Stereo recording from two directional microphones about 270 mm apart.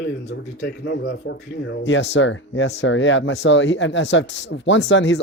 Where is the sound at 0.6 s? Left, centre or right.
Left.